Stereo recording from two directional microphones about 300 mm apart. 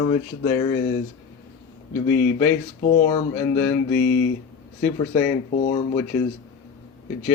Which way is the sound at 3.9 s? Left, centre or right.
Left.